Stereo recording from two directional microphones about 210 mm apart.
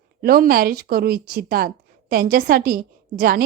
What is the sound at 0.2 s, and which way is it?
Speech, 45° right (ahead or behind).